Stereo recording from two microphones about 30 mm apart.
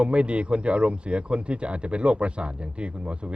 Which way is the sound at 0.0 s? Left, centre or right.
Right.